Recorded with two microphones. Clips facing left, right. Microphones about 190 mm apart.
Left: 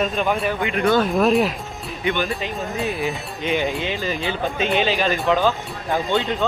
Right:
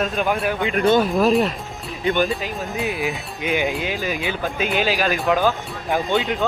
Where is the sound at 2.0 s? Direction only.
35° right (ahead or behind).